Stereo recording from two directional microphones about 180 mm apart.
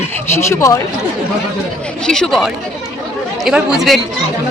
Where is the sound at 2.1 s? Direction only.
5° left (ahead or behind).